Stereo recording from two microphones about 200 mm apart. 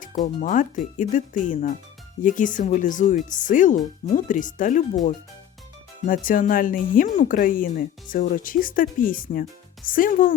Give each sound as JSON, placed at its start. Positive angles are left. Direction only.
{"t": 0.0, "sound": "speech", "side_deg": 40}
{"t": 6.1, "sound": "speech", "side_deg": 45}